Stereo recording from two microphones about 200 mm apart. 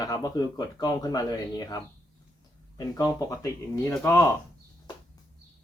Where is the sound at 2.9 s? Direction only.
15° left (ahead or behind).